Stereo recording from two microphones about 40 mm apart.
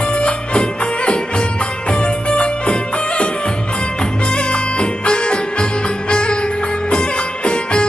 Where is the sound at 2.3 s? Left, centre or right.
Left.